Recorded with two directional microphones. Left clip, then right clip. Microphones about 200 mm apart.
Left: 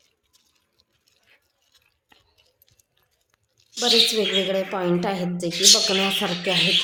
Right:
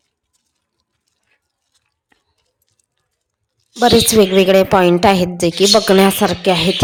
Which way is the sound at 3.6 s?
40° right (ahead or behind).